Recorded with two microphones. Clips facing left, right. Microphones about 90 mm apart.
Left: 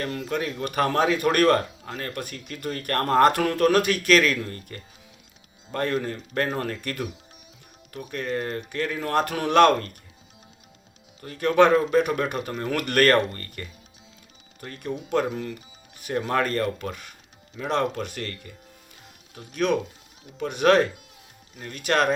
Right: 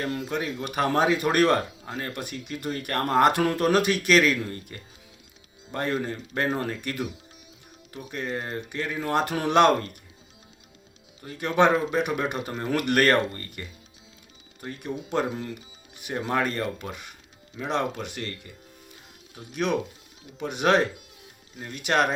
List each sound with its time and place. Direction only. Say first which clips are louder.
0.0 s a man's voice: left 1 dB; 20° right (ahead or behind)
3.4 s a man's voice: left 2 dB; 25° right (ahead or behind)
11.2 s a man's voice: left 3 dB; 20° right (ahead or behind)